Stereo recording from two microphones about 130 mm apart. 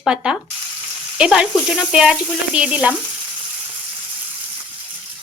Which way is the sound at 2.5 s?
10° right (ahead or behind).